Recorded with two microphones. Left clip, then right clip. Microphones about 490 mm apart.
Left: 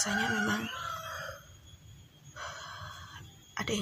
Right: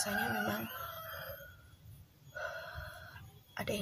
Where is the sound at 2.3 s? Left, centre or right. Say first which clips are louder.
Right 1 dB; right.